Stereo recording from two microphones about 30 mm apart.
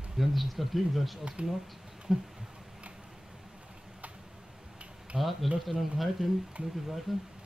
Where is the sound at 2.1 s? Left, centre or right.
Centre.